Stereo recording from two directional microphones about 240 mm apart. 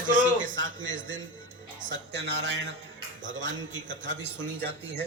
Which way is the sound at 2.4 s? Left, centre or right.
Right.